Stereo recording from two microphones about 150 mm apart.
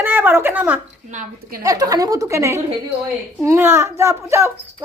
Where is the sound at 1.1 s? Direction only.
75° right (ahead or behind).